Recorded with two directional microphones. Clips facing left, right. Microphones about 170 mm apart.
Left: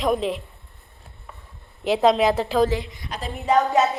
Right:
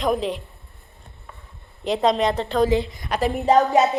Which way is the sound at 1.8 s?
Centre (ahead or behind).